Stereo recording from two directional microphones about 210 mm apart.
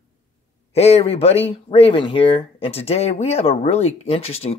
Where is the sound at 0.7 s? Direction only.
30° left (ahead or behind).